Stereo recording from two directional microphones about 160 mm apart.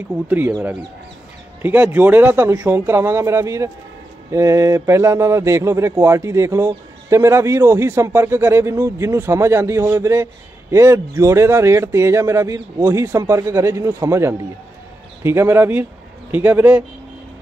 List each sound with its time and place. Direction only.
0.1 s a man's voice: 10° right (ahead or behind)